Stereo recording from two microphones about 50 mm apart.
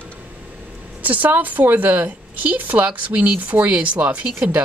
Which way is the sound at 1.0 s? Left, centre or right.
Right.